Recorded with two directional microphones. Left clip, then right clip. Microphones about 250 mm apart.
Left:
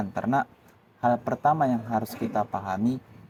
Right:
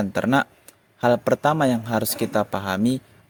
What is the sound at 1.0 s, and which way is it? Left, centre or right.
Speech, right.